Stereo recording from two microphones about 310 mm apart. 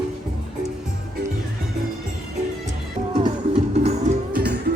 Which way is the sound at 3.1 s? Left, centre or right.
Centre.